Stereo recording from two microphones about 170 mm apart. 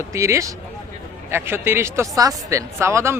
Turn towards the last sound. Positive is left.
turn(degrees=-15)  # may be behind; listen again after turning